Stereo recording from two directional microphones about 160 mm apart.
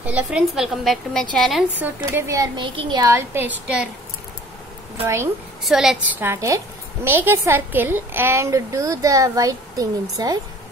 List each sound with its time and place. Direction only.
0.0 s a woman's voice: 10° right (ahead or behind)
2.0 s a woman's voice: 20° right (ahead or behind)
5.0 s a woman's voice: 15° right (ahead or behind)
5.6 s a woman's voice: centre (ahead or behind); by 10.4 s 25° right (ahead or behind)